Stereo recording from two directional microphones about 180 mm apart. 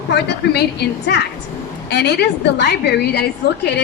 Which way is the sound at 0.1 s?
65° left (ahead or behind).